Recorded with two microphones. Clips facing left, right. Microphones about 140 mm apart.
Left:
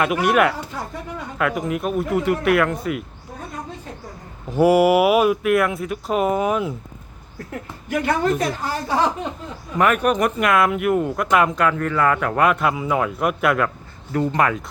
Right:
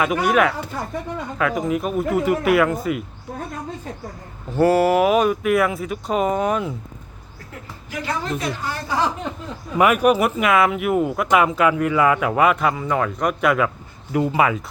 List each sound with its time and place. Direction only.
0.0 s speech: 5° left (ahead or behind)
4.5 s speech: 10° left (ahead or behind)
7.5 s a woman's voice: 55° left (ahead or behind)
9.7 s speech: 10° right (ahead or behind)